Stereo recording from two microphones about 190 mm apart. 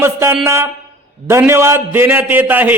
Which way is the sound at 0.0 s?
15° right (ahead or behind).